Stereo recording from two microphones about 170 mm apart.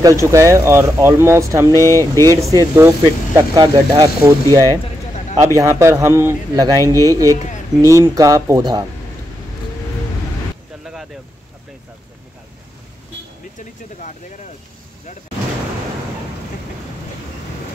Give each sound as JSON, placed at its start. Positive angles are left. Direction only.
{"t": 0.0, "sound": "speech", "side_deg": -15}
{"t": 1.7, "sound": "speech", "side_deg": 15}
{"t": 2.2, "sound": "a man's voice", "side_deg": -20}
{"t": 13.6, "sound": "vehicle", "side_deg": 45}